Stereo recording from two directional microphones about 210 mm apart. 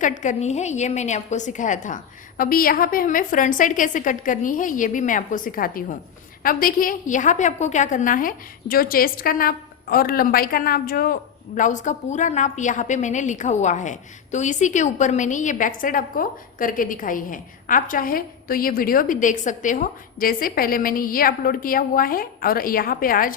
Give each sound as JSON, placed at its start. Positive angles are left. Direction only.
{"t": 0.0, "sound": "a woman's voice", "side_deg": 35}